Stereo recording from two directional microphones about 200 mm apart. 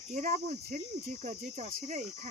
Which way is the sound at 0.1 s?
40° right (ahead or behind).